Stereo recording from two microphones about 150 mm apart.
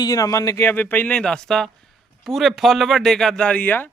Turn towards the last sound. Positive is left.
turn(degrees=10)  # may be behind; listen again after turning